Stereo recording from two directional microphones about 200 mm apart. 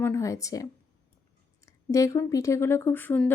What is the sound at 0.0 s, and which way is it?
Speech, 15° left (ahead or behind).